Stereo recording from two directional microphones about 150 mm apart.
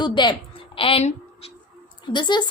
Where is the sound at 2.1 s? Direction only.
30° left (ahead or behind).